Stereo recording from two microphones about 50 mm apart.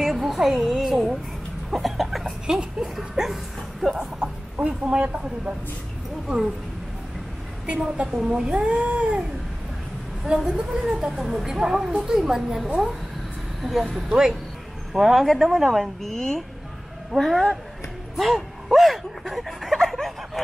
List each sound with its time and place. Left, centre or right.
0.0 s a sound: centre
1.7 s cough: centre
2.4 s speech: centre
6.2 s speech: centre
7.6 s speech: centre
10.2 s speech: centre
14.9 s speech: centre
16.0 s speech: centre
19.8 s a sound: centre